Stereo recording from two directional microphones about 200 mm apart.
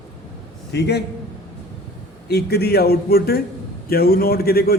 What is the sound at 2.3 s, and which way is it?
A man's voice, 50° left (ahead or behind).